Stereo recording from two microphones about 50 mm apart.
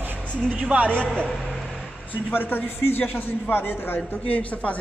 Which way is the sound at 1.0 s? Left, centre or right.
Centre.